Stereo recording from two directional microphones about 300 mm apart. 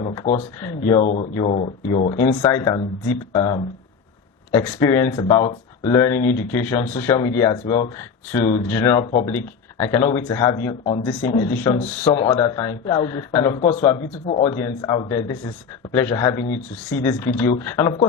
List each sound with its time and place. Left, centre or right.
0.0 s speech: centre